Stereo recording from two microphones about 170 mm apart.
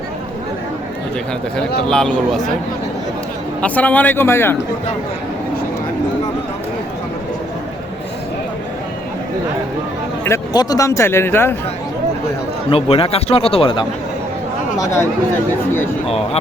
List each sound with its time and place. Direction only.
1.9 s speech: 5° left (ahead or behind)
3.6 s speech: 10° left (ahead or behind)
10.2 s speech: 20° left (ahead or behind)
12.7 s speech: 35° left (ahead or behind)
14.8 s speech: 15° left (ahead or behind)
16.0 s speech: 35° left (ahead or behind)